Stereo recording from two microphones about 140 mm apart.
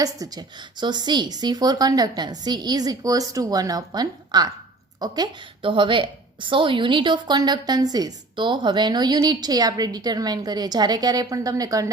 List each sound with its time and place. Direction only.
0.0 s a woman's voice: 25° right (ahead or behind)